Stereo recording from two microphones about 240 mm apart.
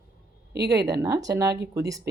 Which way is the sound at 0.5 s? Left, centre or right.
Right.